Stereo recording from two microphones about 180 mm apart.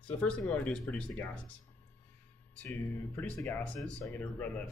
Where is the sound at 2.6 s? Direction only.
10° left (ahead or behind).